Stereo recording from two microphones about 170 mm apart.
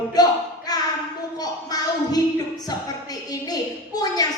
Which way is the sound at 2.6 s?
20° left (ahead or behind).